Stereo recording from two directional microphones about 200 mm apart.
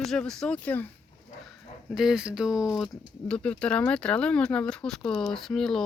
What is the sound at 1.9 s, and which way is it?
Speech, 5° right (ahead or behind).